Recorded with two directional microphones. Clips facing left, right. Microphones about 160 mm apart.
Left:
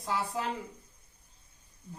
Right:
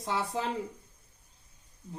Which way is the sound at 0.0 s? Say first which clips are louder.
Right 1 dB; 25° right (ahead or behind).